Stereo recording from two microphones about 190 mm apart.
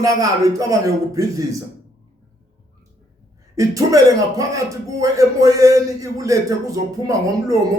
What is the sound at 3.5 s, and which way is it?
A man's voice, 15° right (ahead or behind).